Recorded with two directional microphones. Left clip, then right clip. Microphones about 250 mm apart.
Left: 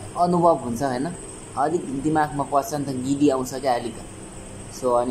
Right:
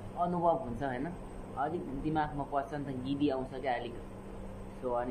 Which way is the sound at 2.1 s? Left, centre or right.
Centre.